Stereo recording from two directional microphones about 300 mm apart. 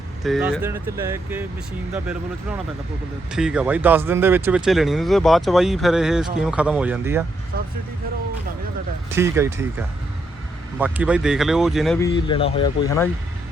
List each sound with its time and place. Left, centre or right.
0.2 s speech: centre
3.3 s speech: centre
7.5 s speech: right
9.1 s speech: centre
12.3 s speech: centre